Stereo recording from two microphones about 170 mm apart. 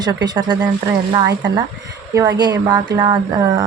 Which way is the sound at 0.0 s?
25° right (ahead or behind).